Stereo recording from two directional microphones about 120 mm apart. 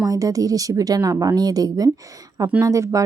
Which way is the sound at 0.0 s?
30° right (ahead or behind).